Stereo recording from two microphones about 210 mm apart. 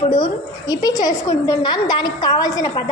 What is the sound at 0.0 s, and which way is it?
A woman's voice, 25° left (ahead or behind).